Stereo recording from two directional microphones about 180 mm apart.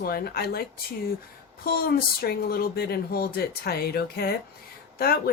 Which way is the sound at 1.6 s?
55° left (ahead or behind).